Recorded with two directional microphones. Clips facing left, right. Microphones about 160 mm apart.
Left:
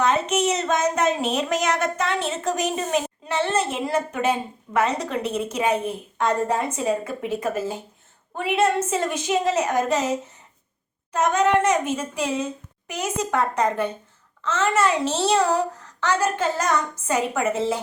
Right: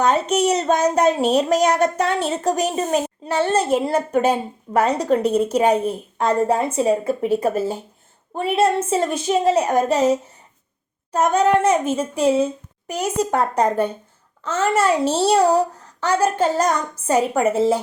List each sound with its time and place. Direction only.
0.0 s speech: 35° right (ahead or behind)
11.1 s speech: 35° right (ahead or behind)